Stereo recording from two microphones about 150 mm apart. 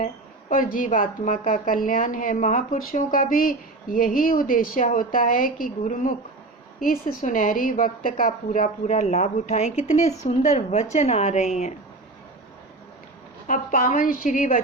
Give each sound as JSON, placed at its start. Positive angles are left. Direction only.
{"t": 0.5, "sound": "a woman's voice", "side_deg": 65}
{"t": 13.5, "sound": "a woman's voice", "side_deg": 60}